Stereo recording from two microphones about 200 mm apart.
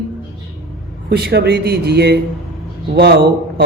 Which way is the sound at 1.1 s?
55° right (ahead or behind).